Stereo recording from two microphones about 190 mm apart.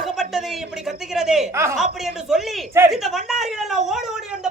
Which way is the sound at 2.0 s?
Centre (ahead or behind).